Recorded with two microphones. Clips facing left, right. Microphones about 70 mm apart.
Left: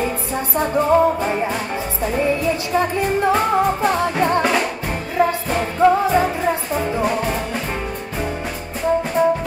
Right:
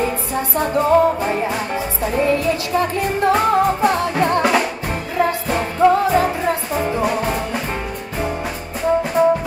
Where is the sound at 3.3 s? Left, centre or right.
Centre.